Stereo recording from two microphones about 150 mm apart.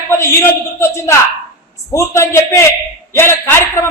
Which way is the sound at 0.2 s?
20° left (ahead or behind).